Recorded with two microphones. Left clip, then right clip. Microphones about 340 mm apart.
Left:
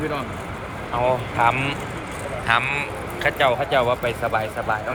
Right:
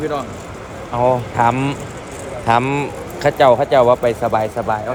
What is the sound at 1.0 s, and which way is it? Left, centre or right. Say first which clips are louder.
Speech: right 4 dB; right.